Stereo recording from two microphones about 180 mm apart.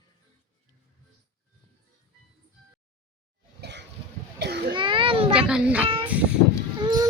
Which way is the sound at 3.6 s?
75° right (ahead or behind).